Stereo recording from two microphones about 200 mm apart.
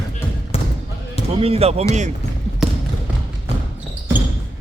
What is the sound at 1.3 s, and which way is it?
Speech, 30° right (ahead or behind).